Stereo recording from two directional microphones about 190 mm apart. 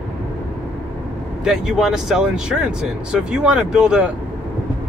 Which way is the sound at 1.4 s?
Centre (ahead or behind).